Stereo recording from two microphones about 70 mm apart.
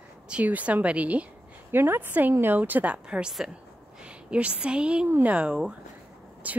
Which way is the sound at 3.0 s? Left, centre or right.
Centre.